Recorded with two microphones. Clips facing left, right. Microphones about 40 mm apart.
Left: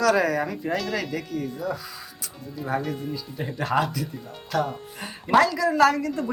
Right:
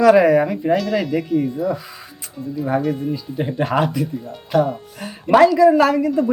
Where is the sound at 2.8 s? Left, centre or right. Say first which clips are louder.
Right 9 dB; centre.